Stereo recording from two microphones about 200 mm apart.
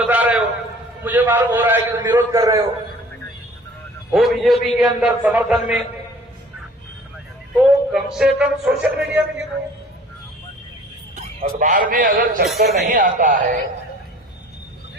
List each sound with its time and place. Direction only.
0.1 s a sound: 5° right (ahead or behind)
1.0 s a man's voice: 10° right (ahead or behind)
4.1 s a man's voice: centre (ahead or behind)
7.5 s a man's voice: centre (ahead or behind)
11.2 s a man's voice: 40° right (ahead or behind)